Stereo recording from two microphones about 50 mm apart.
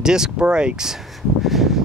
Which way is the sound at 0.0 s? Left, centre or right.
Centre.